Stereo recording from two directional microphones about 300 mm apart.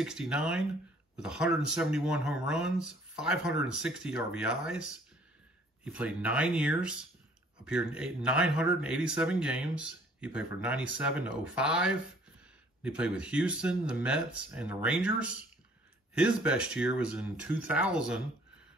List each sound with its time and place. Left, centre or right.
0.0 s speech: centre